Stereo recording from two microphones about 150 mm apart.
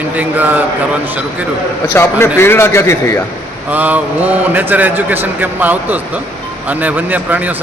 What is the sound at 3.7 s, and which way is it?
A man's voice, 10° right (ahead or behind).